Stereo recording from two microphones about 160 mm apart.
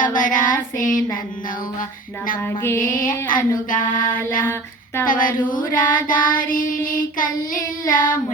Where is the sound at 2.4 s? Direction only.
15° left (ahead or behind).